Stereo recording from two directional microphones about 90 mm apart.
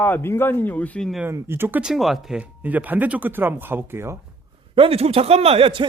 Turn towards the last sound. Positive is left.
turn(degrees=-90)